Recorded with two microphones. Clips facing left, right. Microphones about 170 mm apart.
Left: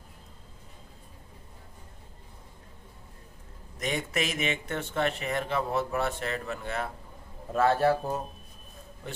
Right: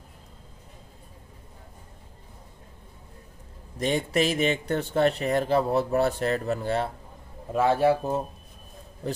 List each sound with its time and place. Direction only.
3.7 s speech: 30° right (ahead or behind)
7.5 s speech: 15° right (ahead or behind)